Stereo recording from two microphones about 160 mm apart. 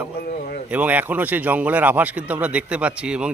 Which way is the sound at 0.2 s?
65° left (ahead or behind).